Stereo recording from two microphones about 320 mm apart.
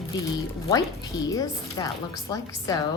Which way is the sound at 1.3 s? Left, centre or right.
Centre.